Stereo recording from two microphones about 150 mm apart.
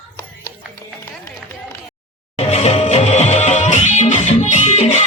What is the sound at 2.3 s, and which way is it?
Music, 45° left (ahead or behind).